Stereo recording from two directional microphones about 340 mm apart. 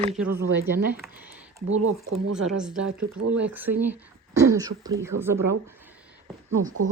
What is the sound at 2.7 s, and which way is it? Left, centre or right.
Speech, right.